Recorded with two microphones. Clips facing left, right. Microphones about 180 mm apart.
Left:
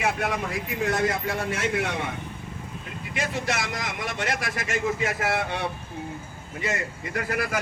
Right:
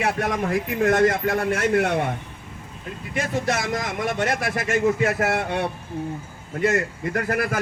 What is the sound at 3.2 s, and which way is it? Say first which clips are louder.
A man's voice: right 4 dB; 50° right (ahead or behind).